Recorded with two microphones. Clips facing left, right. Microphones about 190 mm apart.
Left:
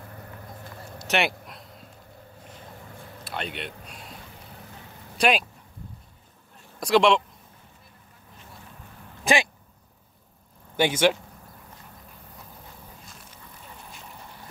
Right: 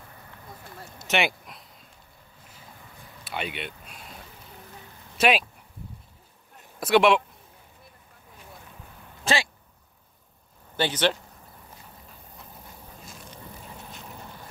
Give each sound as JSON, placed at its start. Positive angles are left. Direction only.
{"t": 1.0, "sound": "a sound", "side_deg": 0}
{"t": 3.3, "sound": "speech", "side_deg": -5}
{"t": 5.1, "sound": "a sound", "side_deg": 0}
{"t": 6.8, "sound": "speech", "side_deg": -5}
{"t": 9.2, "sound": "speech", "side_deg": 15}
{"t": 10.8, "sound": "speech", "side_deg": 10}